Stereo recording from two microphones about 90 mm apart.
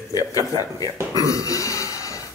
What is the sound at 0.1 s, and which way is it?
Speech, 45° left (ahead or behind).